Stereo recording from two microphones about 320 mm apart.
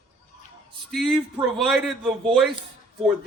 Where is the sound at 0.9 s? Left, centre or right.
Centre.